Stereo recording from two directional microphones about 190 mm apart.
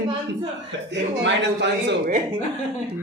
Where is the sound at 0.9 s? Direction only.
70° right (ahead or behind).